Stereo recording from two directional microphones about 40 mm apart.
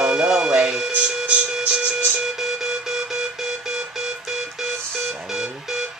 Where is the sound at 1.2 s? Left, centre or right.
Right.